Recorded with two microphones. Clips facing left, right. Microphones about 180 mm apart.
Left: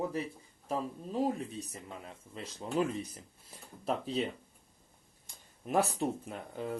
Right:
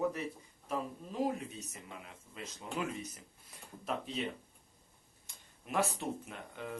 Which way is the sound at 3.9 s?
35° left (ahead or behind).